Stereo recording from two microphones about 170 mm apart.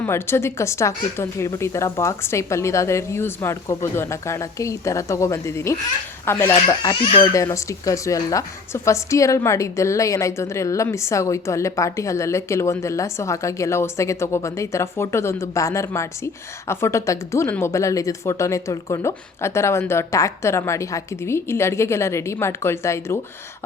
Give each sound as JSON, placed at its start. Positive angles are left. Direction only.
{"t": 0.0, "sound": "a woman's voice", "side_deg": 15}
{"t": 7.0, "sound": "speech", "side_deg": 35}
{"t": 7.3, "sound": "a woman's voice", "side_deg": 20}